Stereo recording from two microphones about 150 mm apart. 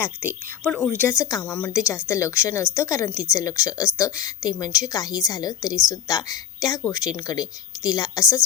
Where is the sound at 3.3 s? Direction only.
20° left (ahead or behind).